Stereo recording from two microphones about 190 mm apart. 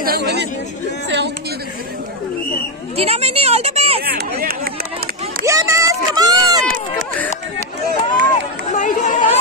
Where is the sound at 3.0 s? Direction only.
30° right (ahead or behind).